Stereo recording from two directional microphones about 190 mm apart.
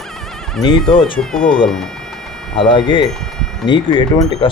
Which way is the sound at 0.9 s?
25° left (ahead or behind).